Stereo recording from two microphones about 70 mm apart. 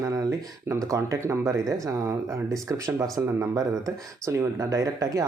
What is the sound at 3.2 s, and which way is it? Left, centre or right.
Speech, right.